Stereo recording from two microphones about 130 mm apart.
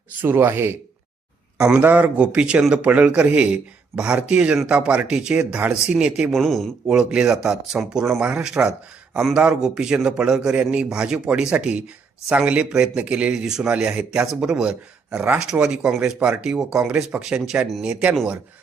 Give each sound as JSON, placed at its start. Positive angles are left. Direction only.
{"t": 0.2, "sound": "a man's voice", "side_deg": -15}